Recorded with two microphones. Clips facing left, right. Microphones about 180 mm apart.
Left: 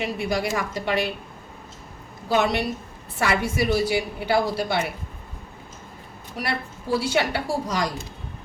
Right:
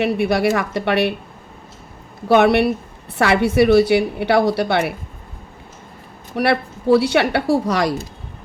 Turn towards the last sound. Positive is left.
turn(degrees=-65)  # may be behind; listen again after turning